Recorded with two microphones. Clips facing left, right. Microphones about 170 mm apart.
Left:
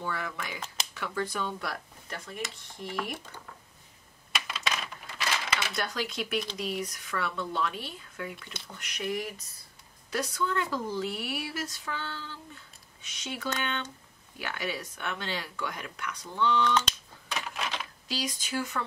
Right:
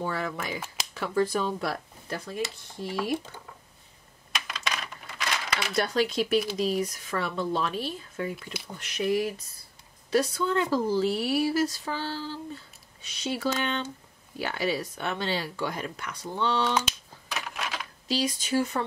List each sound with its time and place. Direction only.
0.0 s speech: 30° right (ahead or behind)
4.3 s typewriter: centre (ahead or behind)
5.8 s speech: 30° right (ahead or behind)
17.3 s a sound: centre (ahead or behind)
18.0 s speech: 25° right (ahead or behind)